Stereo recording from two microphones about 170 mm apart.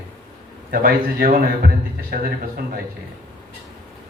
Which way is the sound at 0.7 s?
60° right (ahead or behind).